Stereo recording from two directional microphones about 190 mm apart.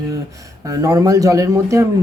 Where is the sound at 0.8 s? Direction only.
20° right (ahead or behind).